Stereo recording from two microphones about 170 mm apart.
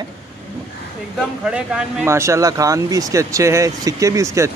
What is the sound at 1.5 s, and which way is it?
Speech, 10° right (ahead or behind).